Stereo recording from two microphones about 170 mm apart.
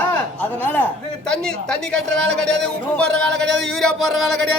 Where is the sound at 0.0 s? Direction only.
10° left (ahead or behind).